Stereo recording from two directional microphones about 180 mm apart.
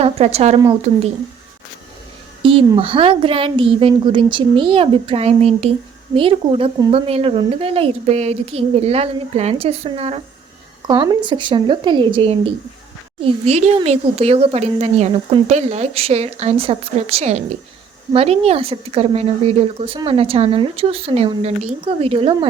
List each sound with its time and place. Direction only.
0.0 s a woman's voice: 35° right (ahead or behind)
2.4 s a sound: 30° right (ahead or behind)
2.6 s a woman's voice: 30° right (ahead or behind)
10.8 s a woman's voice: 25° right (ahead or behind)